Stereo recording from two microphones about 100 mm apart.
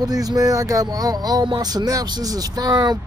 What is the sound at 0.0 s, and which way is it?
Speech, 40° right (ahead or behind).